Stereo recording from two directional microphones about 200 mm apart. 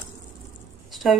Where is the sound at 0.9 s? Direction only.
Centre (ahead or behind).